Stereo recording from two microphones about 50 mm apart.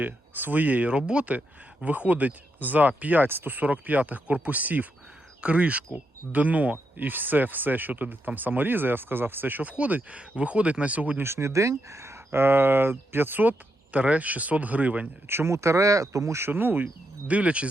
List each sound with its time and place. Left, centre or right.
0.0 s speech: right
0.9 s speech: right
11.2 s speech: right
15.4 s speech: right
16.5 s speech: right
16.8 s speech: right